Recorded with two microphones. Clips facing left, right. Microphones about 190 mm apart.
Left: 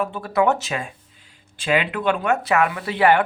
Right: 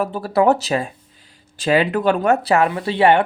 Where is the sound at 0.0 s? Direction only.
40° right (ahead or behind).